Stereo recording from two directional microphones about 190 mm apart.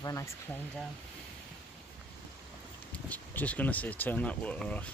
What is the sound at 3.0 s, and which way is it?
Speech, 10° left (ahead or behind).